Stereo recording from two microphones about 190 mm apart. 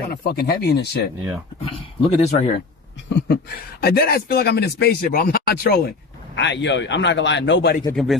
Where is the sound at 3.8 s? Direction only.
55° left (ahead or behind).